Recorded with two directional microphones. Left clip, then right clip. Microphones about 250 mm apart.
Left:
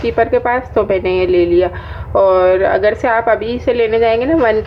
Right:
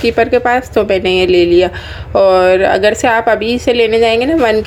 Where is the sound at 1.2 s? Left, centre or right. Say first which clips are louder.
Right 3 dB; centre.